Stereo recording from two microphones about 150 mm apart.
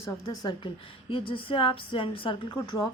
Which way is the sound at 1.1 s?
35° left (ahead or behind).